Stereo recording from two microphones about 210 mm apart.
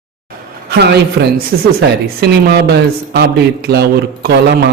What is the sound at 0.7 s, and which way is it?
A man's voice, 50° right (ahead or behind).